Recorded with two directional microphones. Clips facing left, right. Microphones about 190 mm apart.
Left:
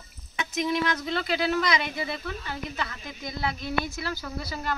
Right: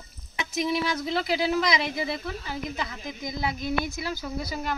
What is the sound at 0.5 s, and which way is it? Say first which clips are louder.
Speech: even; 10° right (ahead or behind).